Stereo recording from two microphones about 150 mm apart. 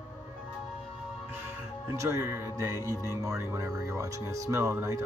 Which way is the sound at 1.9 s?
20° right (ahead or behind).